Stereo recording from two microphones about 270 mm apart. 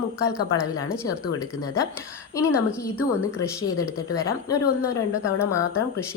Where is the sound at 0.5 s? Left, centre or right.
Centre.